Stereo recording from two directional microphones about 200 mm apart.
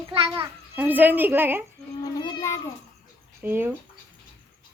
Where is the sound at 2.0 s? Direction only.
20° left (ahead or behind).